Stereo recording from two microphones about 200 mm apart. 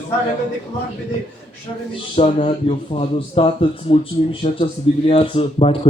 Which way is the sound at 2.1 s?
30° left (ahead or behind).